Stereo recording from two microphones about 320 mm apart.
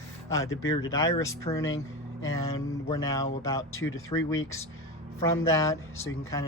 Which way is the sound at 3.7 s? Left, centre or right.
Left.